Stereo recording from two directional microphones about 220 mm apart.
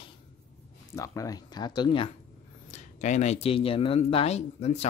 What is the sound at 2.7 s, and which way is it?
Speech, 30° left (ahead or behind).